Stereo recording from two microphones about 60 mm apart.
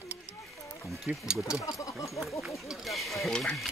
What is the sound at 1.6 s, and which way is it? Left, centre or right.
Speech, left.